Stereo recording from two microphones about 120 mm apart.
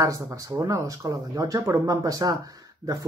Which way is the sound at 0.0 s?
30° right (ahead or behind).